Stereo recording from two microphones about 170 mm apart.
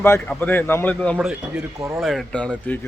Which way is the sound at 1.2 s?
5° right (ahead or behind).